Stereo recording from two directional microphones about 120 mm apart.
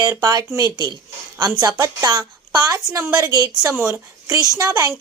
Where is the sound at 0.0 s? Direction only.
30° right (ahead or behind).